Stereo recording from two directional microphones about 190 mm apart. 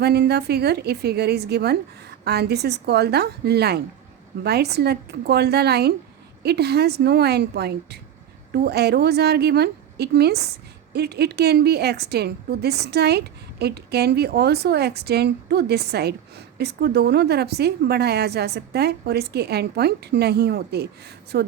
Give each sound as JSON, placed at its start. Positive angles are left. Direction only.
{"t": 0.0, "sound": "a woman's voice", "side_deg": -60}